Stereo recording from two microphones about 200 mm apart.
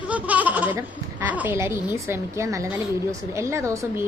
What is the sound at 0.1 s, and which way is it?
A woman's voice, 10° right (ahead or behind).